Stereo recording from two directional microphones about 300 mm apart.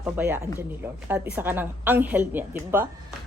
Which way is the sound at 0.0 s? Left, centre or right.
Centre.